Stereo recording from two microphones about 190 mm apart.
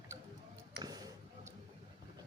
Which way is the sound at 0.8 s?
20° right (ahead or behind).